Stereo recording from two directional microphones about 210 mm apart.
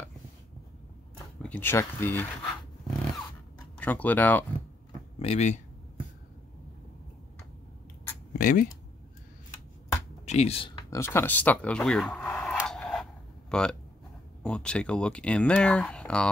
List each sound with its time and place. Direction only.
1.4 s speech: 10° left (ahead or behind)
3.7 s speech: 5° left (ahead or behind)
5.2 s speech: 30° left (ahead or behind)
8.3 s a sound: 40° left (ahead or behind)
10.2 s speech: 30° left (ahead or behind)
10.9 s a sound: 10° left (ahead or behind)
14.4 s speech: 5° left (ahead or behind)